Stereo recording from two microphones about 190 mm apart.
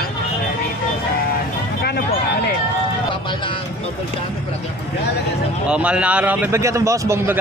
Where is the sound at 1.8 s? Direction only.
55° left (ahead or behind).